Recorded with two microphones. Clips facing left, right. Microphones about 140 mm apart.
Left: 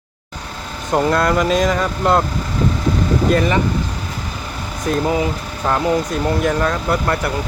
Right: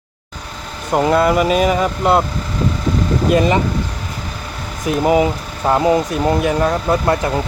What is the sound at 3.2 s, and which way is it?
Speech, 20° right (ahead or behind).